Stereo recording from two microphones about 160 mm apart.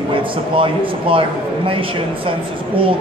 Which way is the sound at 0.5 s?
35° right (ahead or behind).